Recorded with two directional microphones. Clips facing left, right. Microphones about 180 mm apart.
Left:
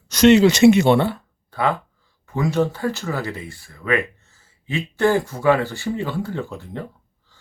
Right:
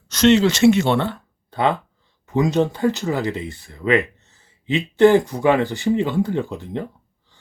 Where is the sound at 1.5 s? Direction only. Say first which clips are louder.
Right 2 dB; 20° right (ahead or behind).